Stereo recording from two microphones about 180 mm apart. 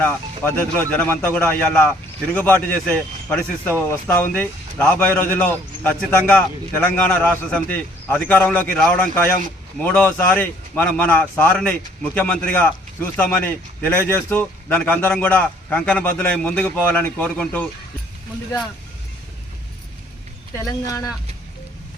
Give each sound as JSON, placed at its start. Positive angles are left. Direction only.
{"t": 0.0, "sound": "a man's voice", "side_deg": 10}
{"t": 20.8, "sound": "speech", "side_deg": 20}